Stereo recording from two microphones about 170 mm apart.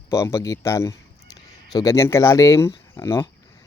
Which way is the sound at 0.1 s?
15° left (ahead or behind).